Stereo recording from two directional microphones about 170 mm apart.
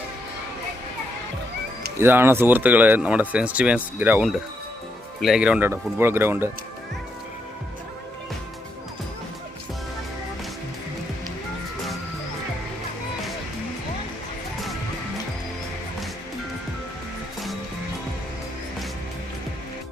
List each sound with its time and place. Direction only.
2.0 s speech: 10° right (ahead or behind)